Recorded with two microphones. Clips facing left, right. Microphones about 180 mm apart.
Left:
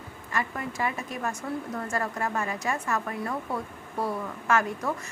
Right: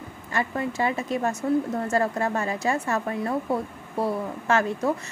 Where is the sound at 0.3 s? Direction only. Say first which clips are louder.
Right 5 dB; 30° right (ahead or behind).